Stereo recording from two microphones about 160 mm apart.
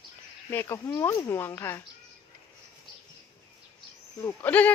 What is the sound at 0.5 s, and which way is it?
Speech, 15° left (ahead or behind).